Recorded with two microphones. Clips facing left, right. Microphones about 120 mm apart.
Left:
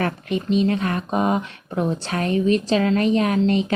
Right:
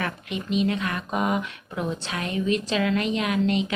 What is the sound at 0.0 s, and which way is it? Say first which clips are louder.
Speech: left 7 dB; 40° left (ahead or behind).